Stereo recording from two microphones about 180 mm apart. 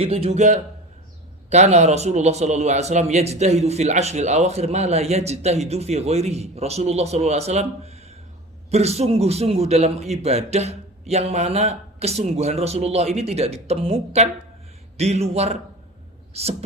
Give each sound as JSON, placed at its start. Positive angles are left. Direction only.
{"t": 0.0, "sound": "a man's voice", "side_deg": -30}